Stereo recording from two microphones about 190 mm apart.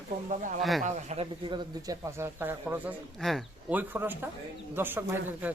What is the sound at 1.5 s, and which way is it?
A man's voice, 15° right (ahead or behind).